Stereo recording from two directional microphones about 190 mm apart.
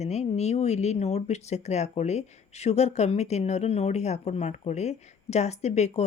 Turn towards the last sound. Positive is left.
turn(degrees=35)  # may be behind; listen again after turning